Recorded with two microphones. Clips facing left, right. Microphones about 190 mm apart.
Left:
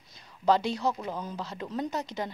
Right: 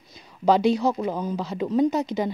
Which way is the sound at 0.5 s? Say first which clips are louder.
Right 6 dB; 15° right (ahead or behind).